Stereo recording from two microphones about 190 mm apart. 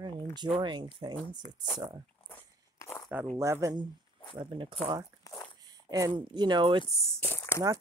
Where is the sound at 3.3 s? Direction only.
15° right (ahead or behind).